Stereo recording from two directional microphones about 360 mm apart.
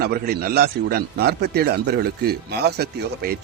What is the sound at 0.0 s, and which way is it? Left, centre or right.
A man's voice, right.